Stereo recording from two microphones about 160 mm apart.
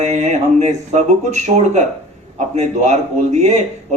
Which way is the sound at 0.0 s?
45° right (ahead or behind).